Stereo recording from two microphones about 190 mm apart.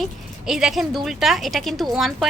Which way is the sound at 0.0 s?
Centre (ahead or behind).